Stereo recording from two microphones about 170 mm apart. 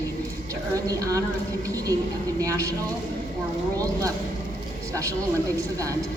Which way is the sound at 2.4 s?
20° right (ahead or behind).